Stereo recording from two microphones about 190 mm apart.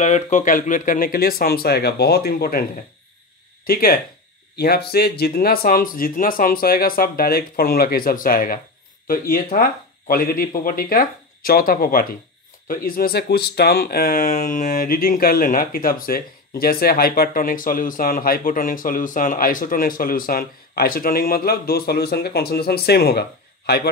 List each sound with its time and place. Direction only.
0.0 s speech: 40° left (ahead or behind); by 2.6 s 55° left (ahead or behind)
3.6 s speech: 50° left (ahead or behind)